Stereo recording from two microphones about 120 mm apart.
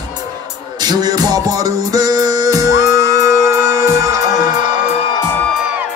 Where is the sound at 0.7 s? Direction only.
35° right (ahead or behind).